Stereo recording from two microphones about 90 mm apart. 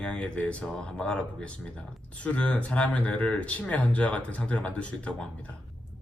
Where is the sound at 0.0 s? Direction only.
10° left (ahead or behind).